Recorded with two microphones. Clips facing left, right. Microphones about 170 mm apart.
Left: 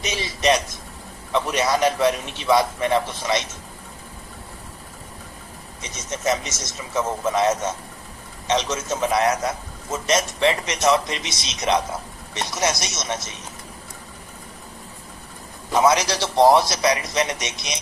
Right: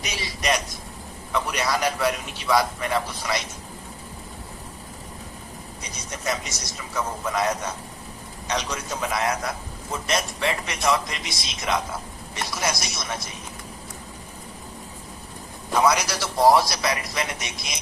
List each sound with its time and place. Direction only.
0.0 s a man's voice: 20° left (ahead or behind)
6.1 s a man's voice: 20° left (ahead or behind)
15.7 s a man's voice: 20° left (ahead or behind)